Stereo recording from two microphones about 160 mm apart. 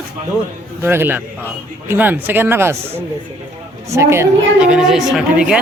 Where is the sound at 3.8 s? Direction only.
15° right (ahead or behind).